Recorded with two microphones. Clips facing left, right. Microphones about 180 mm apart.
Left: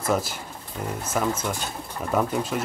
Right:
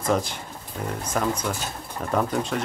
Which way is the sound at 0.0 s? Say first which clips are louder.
Right 1 dB; 5° left (ahead or behind).